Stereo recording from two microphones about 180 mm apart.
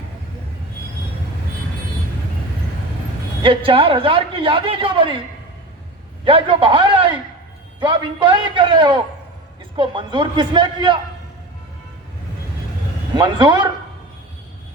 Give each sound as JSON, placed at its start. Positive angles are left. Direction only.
{"t": 3.4, "sound": "a man's voice", "side_deg": -30}
{"t": 6.2, "sound": "a man's voice", "side_deg": -30}
{"t": 13.1, "sound": "a man's voice", "side_deg": -25}